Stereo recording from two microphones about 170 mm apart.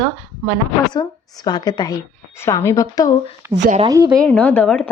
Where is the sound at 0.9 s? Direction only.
25° left (ahead or behind).